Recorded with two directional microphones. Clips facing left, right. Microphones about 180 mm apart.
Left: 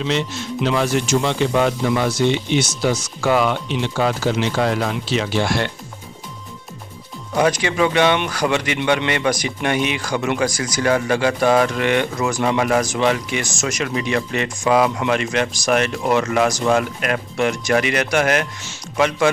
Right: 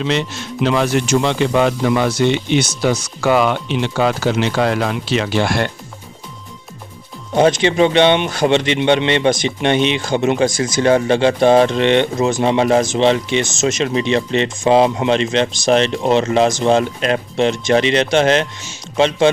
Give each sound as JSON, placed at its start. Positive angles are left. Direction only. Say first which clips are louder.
{"t": 0.6, "sound": "speech", "louder": "right 3 dB", "side_deg": -65}
{"t": 7.3, "sound": "speech", "louder": "right 5 dB", "side_deg": -25}